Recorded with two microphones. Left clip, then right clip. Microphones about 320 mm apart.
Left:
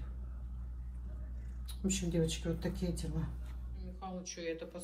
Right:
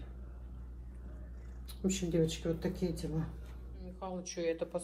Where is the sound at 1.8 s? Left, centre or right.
Centre.